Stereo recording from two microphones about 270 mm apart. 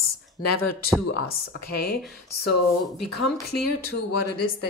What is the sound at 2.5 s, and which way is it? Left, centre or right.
Speech, left.